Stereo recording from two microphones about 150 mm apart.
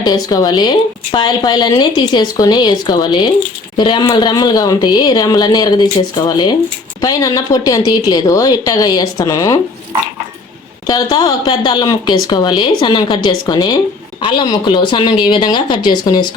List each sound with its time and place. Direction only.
0.0 s speech: 25° left (ahead or behind)
10.8 s a woman's voice: 25° left (ahead or behind)